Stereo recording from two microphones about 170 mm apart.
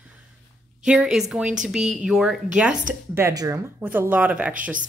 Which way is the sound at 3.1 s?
20° right (ahead or behind).